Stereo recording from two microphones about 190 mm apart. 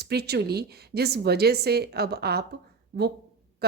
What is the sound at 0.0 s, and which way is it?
A woman's voice, 55° right (ahead or behind).